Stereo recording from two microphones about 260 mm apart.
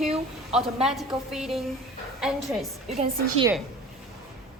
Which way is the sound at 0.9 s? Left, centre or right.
Centre.